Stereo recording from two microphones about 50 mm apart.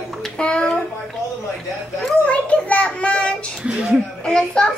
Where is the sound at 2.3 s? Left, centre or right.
Left.